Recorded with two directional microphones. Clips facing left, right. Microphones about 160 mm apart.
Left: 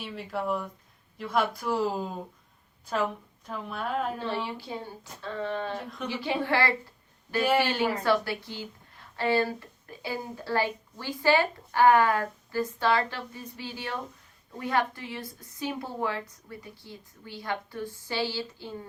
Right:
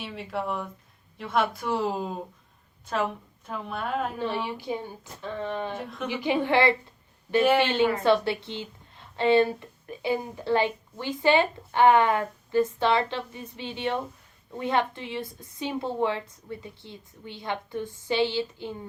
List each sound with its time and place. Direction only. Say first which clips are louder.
0.0 s speech: right 1 dB; centre (ahead or behind)
3.4 s speech: right 1 dB; centre (ahead or behind)
4.2 s a woman's voice: right 2 dB; 15° right (ahead or behind)